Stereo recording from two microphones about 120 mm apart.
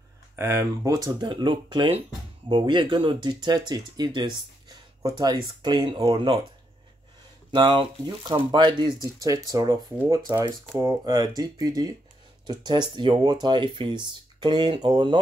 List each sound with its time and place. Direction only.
0.4 s speech: 25° right (ahead or behind)
7.5 s speech: 40° right (ahead or behind)